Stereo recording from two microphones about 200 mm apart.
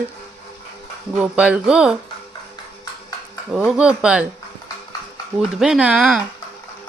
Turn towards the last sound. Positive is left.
turn(degrees=-5)  # may be behind; listen again after turning